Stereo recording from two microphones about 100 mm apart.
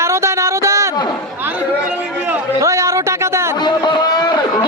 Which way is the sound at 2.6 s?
30° right (ahead or behind).